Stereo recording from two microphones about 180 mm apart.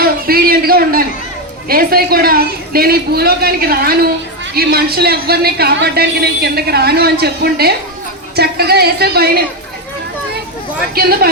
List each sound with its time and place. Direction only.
0.0 s a sound: 55° right (ahead or behind)
1.6 s a woman's voice: 55° right (ahead or behind)
10.9 s a woman's voice: 55° right (ahead or behind)